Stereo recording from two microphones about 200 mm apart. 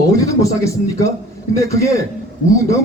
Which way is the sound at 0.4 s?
15° left (ahead or behind).